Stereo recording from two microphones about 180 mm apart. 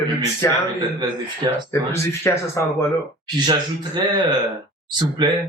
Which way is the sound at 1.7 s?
15° left (ahead or behind).